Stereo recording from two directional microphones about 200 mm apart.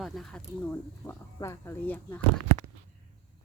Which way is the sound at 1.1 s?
15° left (ahead or behind).